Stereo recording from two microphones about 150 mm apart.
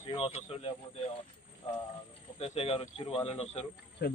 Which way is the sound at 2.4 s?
40° left (ahead or behind).